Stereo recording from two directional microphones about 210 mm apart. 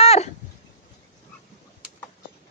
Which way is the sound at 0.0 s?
30° left (ahead or behind).